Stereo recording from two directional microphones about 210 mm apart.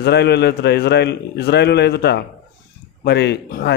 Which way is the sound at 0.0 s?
50° left (ahead or behind).